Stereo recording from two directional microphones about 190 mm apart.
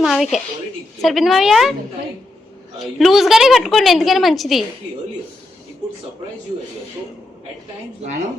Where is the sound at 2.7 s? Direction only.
Centre (ahead or behind).